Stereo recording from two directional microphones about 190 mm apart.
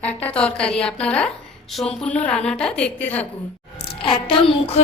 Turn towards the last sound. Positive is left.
turn(degrees=30)  # may be behind; listen again after turning